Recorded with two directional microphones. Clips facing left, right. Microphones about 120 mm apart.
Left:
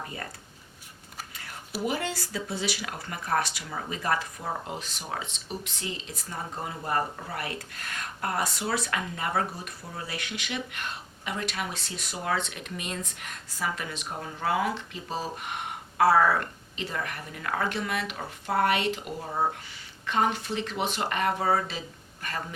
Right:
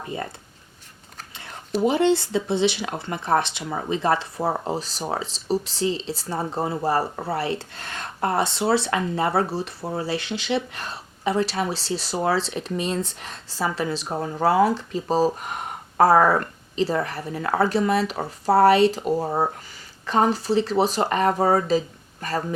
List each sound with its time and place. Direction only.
0.1 s speech: 25° right (ahead or behind)
1.3 s a sound: 25° right (ahead or behind)
1.8 s speech: 25° right (ahead or behind)